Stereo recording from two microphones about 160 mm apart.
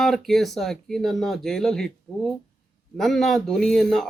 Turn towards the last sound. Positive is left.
turn(degrees=0)  # may be behind; listen again after turning